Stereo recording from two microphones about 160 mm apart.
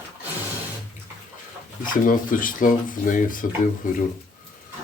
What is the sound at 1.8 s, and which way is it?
Speech, 60° left (ahead or behind).